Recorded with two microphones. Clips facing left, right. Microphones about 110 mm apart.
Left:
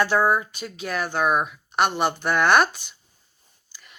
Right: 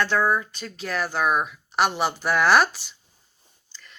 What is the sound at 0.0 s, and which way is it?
Speech, 10° left (ahead or behind).